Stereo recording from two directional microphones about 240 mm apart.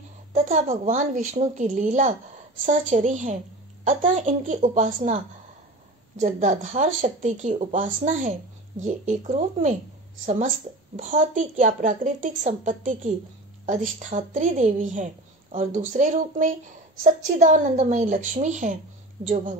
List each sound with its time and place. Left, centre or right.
0.3 s a woman's voice: right